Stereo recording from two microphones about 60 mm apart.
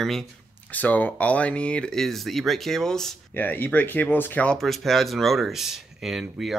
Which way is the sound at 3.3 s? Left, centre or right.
Left.